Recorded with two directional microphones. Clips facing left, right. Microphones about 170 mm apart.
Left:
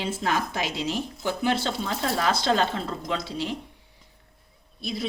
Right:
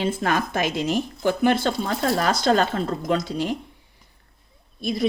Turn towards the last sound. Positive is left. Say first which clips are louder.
# right 6 dB
turn(degrees=-50)  # may be behind; listen again after turning